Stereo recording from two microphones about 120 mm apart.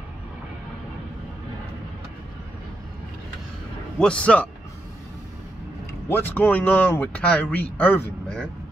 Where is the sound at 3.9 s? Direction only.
10° left (ahead or behind).